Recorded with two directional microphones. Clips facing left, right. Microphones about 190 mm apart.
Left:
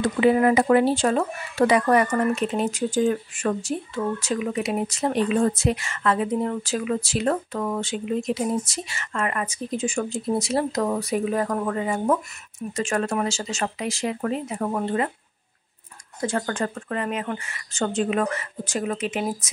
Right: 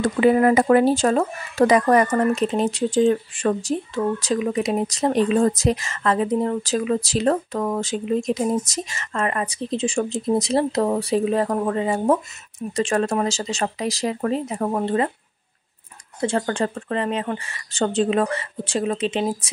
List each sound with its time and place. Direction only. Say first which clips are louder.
0.0 s speech: right 2 dB; 45° right (ahead or behind)
16.2 s speech: right 3 dB; 30° right (ahead or behind)